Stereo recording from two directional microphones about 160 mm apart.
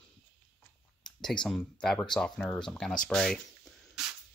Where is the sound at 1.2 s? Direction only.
5° left (ahead or behind).